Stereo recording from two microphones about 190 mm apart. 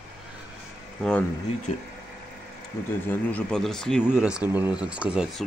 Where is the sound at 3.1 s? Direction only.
10° left (ahead or behind).